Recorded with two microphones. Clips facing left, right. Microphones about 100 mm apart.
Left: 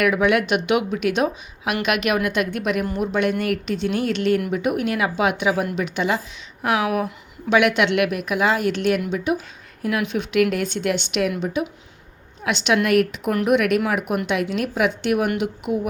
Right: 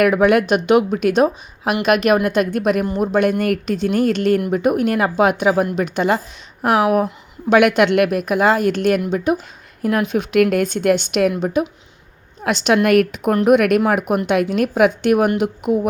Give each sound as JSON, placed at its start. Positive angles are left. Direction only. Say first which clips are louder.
{"t": 0.0, "sound": "a woman's voice", "louder": "right 5 dB", "side_deg": -45}
{"t": 7.5, "sound": "a woman's voice", "louder": "right 5 dB", "side_deg": -45}